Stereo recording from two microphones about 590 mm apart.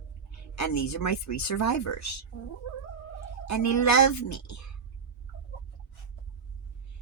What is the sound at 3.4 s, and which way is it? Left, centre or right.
Speech, left.